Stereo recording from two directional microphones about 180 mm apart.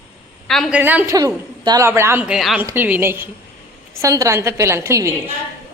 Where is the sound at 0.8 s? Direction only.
10° right (ahead or behind).